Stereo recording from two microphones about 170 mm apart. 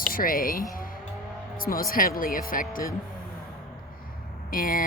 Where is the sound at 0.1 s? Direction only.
55° left (ahead or behind).